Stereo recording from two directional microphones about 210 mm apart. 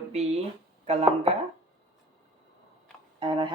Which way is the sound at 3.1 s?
25° right (ahead or behind).